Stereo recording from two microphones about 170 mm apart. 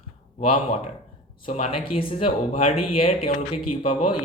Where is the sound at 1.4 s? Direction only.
35° left (ahead or behind).